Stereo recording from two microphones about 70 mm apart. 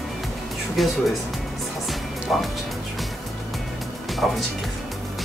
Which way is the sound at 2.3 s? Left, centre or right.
Centre.